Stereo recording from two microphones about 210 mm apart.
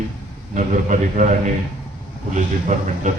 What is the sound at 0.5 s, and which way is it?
Speech, 35° right (ahead or behind).